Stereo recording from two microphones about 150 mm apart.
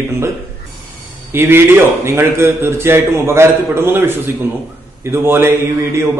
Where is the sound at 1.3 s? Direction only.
15° right (ahead or behind).